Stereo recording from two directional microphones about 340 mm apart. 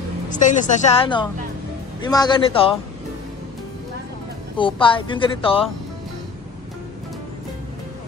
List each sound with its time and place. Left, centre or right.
0.3 s a woman's voice: left
4.6 s speech: centre